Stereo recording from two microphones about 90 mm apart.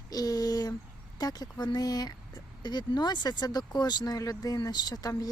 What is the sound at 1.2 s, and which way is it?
Speech, 50° left (ahead or behind).